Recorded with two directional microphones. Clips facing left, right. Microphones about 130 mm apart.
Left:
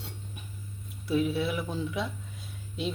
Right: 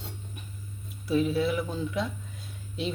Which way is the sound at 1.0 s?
Centre (ahead or behind).